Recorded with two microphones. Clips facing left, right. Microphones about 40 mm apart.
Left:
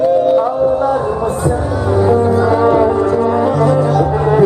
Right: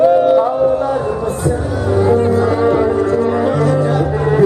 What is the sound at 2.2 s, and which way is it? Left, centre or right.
Music, right.